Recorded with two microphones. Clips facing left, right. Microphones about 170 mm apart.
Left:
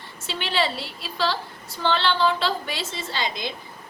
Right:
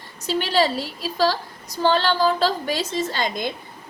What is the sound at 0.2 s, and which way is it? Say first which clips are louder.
A woman's voice: right 6 dB; 40° right (ahead or behind).